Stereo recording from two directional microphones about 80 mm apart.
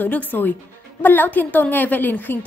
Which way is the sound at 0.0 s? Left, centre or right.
Left.